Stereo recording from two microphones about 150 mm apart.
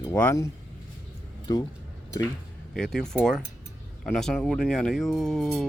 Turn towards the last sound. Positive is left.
turn(degrees=0)  # may be behind; listen again after turning